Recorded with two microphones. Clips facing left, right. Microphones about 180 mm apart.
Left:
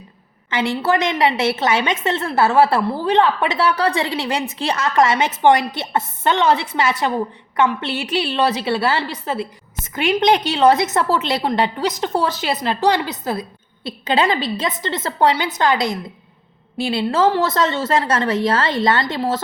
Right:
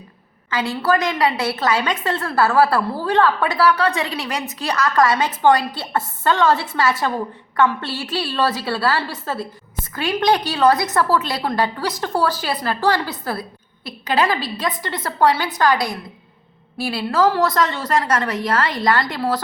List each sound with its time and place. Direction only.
0.5 s a woman's voice: 25° left (ahead or behind)